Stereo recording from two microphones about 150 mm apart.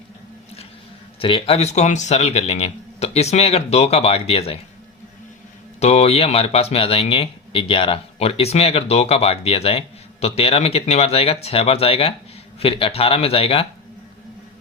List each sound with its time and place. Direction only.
1.2 s speech: 40° left (ahead or behind)
5.8 s speech: 45° left (ahead or behind)